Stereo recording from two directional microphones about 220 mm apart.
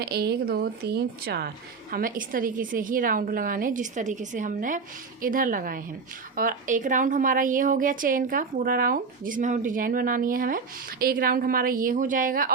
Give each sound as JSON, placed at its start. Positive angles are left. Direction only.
{"t": 0.0, "sound": "a woman's voice", "side_deg": -45}